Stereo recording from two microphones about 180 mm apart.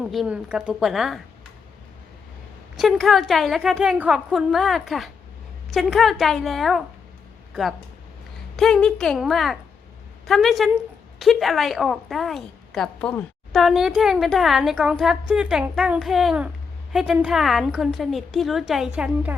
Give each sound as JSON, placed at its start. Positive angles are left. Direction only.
{"t": 0.0, "sound": "a woman's voice", "side_deg": -5}
{"t": 2.7, "sound": "a woman's voice", "side_deg": 0}